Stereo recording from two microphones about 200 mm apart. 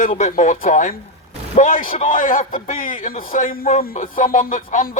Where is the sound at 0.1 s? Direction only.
35° left (ahead or behind).